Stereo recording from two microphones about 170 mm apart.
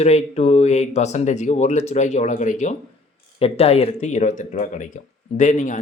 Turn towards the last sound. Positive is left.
turn(degrees=45)  # may be behind; listen again after turning